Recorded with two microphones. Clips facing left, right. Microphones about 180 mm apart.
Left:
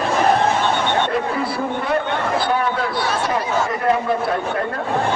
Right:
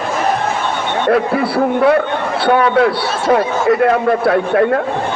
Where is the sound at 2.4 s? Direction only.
70° right (ahead or behind).